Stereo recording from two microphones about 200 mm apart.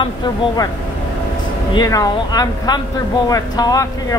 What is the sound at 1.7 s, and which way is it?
Speech, 20° left (ahead or behind).